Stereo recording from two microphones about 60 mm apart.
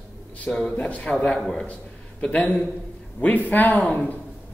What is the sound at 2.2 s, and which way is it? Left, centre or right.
A man's voice, left.